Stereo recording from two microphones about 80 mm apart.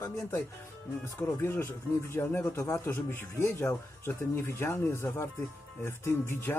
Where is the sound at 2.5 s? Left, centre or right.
Left.